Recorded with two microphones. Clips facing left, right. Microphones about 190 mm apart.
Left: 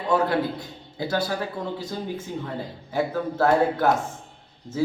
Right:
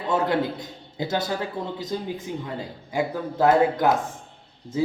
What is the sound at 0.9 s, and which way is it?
A man's voice, 20° right (ahead or behind).